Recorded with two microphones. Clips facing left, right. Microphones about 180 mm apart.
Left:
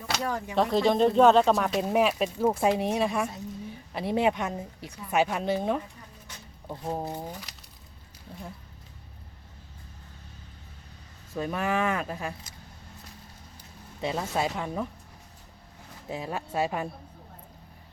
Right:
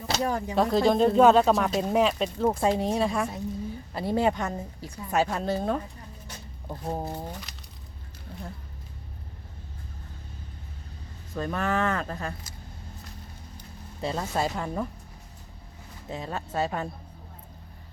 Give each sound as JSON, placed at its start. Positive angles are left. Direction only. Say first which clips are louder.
{"t": 0.1, "sound": "speech", "louder": "right 3 dB", "side_deg": -25}
{"t": 0.5, "sound": "speech", "louder": "right 1 dB", "side_deg": 0}
{"t": 11.3, "sound": "speech", "louder": "even", "side_deg": 5}
{"t": 14.0, "sound": "speech", "louder": "even", "side_deg": 5}
{"t": 16.0, "sound": "speech", "louder": "left 1 dB", "side_deg": 10}